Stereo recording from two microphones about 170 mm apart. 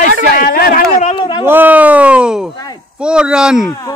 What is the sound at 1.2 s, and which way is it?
Speech, 25° left (ahead or behind).